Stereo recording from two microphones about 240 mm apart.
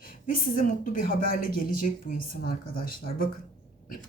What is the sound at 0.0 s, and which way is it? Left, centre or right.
Speech, left.